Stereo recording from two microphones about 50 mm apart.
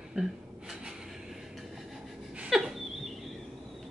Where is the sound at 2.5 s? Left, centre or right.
Centre.